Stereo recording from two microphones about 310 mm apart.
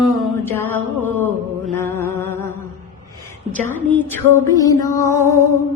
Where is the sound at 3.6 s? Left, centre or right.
Centre.